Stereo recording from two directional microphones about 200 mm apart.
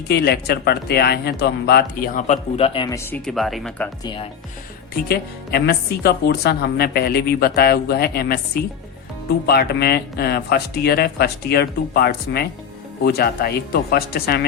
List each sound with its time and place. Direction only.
0.1 s speech: 55° left (ahead or behind); by 3.8 s centre (ahead or behind)
4.0 s speech: 25° left (ahead or behind)
5.0 s speech: 50° left (ahead or behind)
9.5 s speech: 50° left (ahead or behind)